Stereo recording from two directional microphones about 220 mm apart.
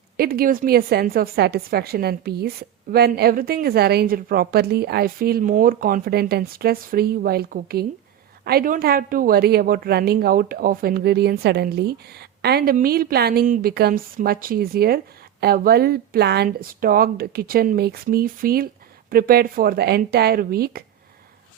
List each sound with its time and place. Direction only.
0.2 s a woman's voice: 45° right (ahead or behind)